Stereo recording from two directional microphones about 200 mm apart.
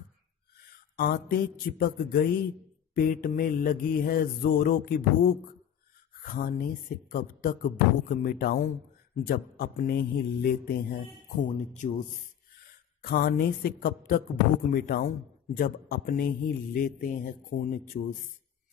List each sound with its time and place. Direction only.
0.9 s mantra: 50° left (ahead or behind)
10.7 s speech: 45° left (ahead or behind)
13.0 s mantra: 50° left (ahead or behind)